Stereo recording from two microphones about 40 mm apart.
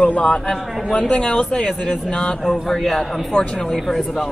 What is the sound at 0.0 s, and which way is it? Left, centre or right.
A man's voice, left.